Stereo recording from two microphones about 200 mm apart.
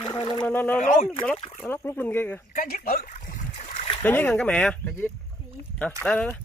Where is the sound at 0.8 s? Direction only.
45° left (ahead or behind).